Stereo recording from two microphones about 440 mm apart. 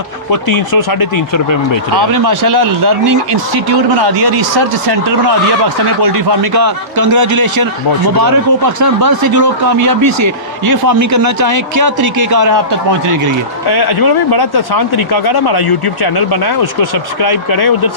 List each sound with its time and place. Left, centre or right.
0.7 s speech: left
2.0 s speech: right
6.0 s speech: right
6.6 s a man's voice: right
7.3 s a man's voice: right
8.2 s speech: right
10.0 s a man's voice: right
13.7 s speech: left